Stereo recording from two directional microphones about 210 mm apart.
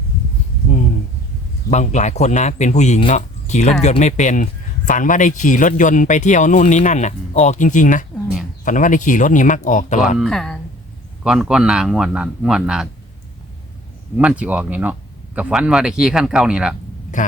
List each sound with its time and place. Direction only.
1.7 s speech: 35° left (ahead or behind)
10.2 s a man's voice: centre (ahead or behind)
14.2 s a man's voice: 5° right (ahead or behind)